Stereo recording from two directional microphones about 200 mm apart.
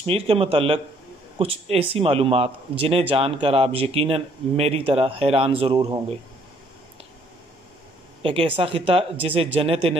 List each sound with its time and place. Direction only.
0.0 s speech: 30° right (ahead or behind)
8.2 s speech: 25° right (ahead or behind)